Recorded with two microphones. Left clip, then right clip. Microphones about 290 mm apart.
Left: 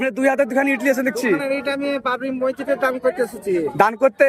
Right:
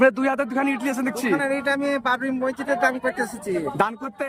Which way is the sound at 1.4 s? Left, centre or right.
Right.